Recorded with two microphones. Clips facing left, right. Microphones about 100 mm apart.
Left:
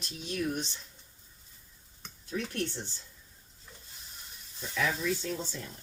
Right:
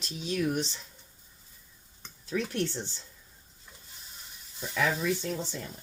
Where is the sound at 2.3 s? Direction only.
90° right.